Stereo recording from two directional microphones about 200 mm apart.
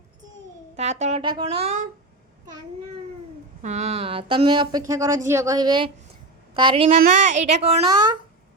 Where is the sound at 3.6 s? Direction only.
35° right (ahead or behind).